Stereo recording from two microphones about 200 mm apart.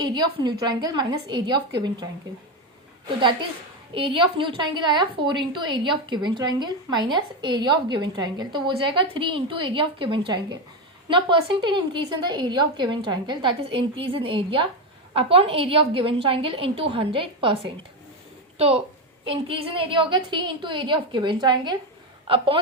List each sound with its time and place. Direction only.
0.0 s a woman's voice: 20° right (ahead or behind)
3.9 s a woman's voice: 25° right (ahead or behind)